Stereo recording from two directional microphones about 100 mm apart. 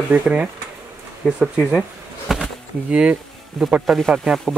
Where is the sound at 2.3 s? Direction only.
5° right (ahead or behind).